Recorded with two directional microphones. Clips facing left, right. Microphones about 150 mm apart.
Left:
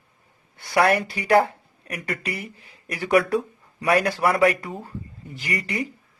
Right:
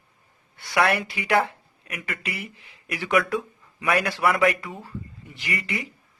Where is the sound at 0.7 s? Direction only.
35° left (ahead or behind).